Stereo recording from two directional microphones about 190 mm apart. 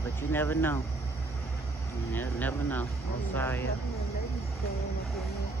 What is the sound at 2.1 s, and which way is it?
Speech, 10° left (ahead or behind).